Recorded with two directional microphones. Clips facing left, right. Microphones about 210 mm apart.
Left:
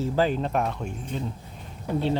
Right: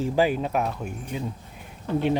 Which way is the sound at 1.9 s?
15° left (ahead or behind).